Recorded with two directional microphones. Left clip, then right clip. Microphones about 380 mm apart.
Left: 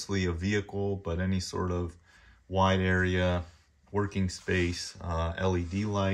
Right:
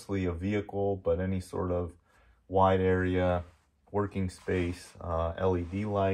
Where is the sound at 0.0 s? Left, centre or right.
Centre.